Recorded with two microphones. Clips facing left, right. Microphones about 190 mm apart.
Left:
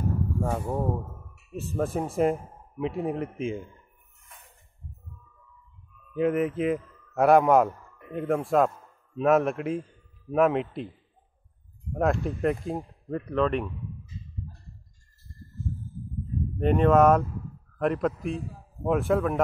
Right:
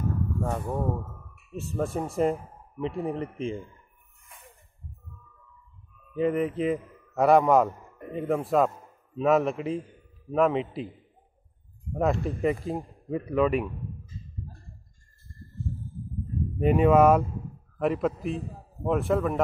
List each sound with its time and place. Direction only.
0.4 s speech: 5° left (ahead or behind)
5.9 s speech: centre (ahead or behind)
6.8 s a sound: 15° right (ahead or behind)
7.2 s speech: centre (ahead or behind)
7.7 s a sound: 20° right (ahead or behind)
8.1 s speech: centre (ahead or behind)
11.9 s speech: centre (ahead or behind)
13.7 s a sound: 50° right (ahead or behind)
16.5 s a man's voice: 5° right (ahead or behind)